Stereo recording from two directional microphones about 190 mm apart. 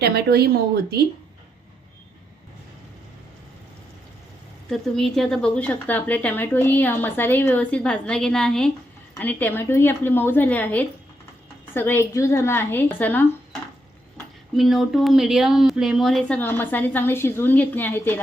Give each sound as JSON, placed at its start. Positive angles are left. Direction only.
{"t": 0.0, "sound": "speech", "side_deg": -55}
{"t": 4.7, "sound": "a woman's voice", "side_deg": 0}
{"t": 14.5, "sound": "a woman's voice", "side_deg": 0}